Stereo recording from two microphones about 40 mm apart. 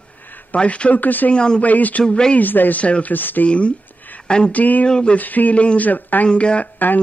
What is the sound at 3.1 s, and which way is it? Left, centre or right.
Speech, left.